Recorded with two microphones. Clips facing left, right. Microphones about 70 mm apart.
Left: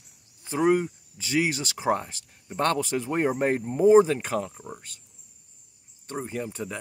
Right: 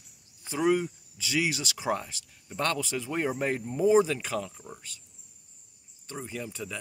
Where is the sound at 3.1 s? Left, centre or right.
Left.